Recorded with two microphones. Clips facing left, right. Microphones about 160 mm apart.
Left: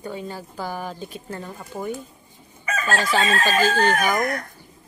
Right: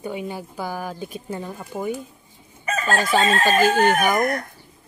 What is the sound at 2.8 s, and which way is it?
Chicken, 20° right (ahead or behind).